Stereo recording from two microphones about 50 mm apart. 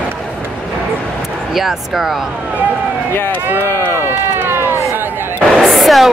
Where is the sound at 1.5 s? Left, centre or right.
Centre.